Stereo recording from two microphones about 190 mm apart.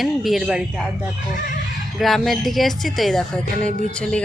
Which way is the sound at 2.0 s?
Centre (ahead or behind).